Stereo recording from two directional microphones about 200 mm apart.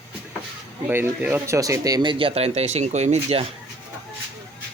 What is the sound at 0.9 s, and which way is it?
Speech, 10° right (ahead or behind).